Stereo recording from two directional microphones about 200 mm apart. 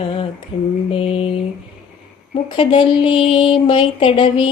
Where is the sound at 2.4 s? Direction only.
25° left (ahead or behind).